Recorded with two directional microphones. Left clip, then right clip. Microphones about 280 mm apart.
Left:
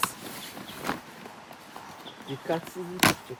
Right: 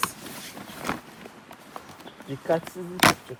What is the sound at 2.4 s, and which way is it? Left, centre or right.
Speech, centre.